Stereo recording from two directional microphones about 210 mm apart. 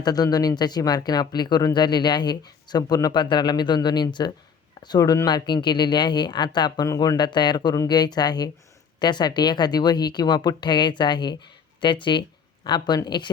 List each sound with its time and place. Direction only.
0.0 s speech: 20° left (ahead or behind)